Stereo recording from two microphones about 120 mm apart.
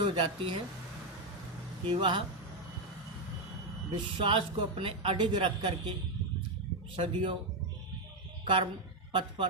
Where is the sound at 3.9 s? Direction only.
45° right (ahead or behind).